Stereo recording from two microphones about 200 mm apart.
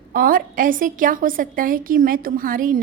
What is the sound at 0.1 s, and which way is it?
A woman's voice, 45° right (ahead or behind).